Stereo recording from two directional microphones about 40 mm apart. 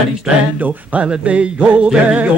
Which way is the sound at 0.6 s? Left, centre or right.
Right.